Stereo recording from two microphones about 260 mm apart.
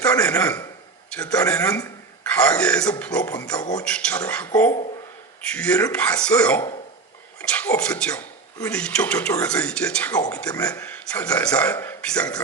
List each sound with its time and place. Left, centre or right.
0.0 s speech: centre
3.8 s speech: centre
4.7 s speech: left
5.5 s speech: centre